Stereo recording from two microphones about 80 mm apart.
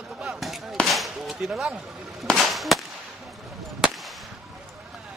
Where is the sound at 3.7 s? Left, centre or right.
Centre.